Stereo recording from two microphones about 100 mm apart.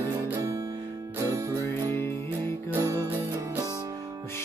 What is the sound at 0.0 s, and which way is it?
Music, 30° right (ahead or behind).